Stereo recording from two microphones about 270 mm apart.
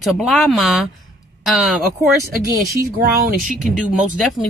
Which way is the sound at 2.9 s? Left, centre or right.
Right.